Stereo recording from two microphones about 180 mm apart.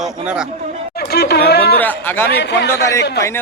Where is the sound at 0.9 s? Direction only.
60° left (ahead or behind).